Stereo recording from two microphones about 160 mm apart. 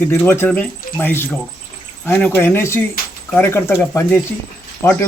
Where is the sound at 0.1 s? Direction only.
15° left (ahead or behind).